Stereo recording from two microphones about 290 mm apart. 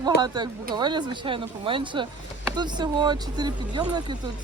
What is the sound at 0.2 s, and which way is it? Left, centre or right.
Speech, centre.